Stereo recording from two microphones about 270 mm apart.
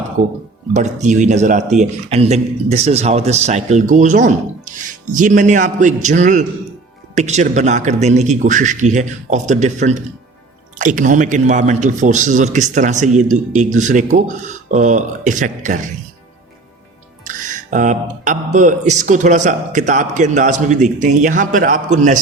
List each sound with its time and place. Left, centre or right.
0.7 s speech: right
17.2 s speech: right